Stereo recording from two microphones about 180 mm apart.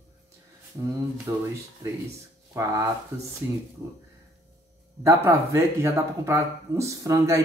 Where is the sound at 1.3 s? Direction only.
20° right (ahead or behind).